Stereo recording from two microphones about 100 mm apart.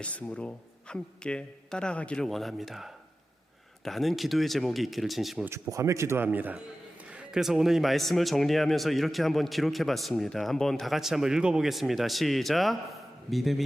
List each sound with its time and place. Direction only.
0.0 s a man's voice: 10° left (ahead or behind)
5.5 s speech: 30° right (ahead or behind)
6.2 s a man's voice: 15° right (ahead or behind); by 13.7 s centre (ahead or behind)